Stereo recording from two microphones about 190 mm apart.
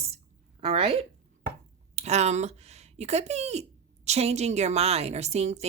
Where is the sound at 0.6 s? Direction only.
30° right (ahead or behind).